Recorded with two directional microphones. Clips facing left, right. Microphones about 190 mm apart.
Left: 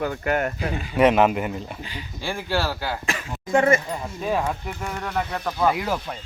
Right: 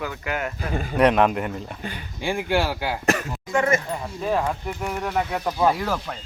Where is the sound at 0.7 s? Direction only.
45° right (ahead or behind).